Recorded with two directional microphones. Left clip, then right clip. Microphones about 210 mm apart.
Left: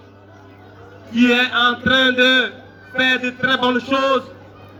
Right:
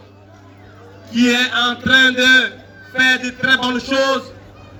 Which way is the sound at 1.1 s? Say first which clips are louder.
Even; 55° right (ahead or behind).